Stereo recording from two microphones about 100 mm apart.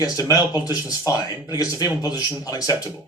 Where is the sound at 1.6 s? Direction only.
35° left (ahead or behind).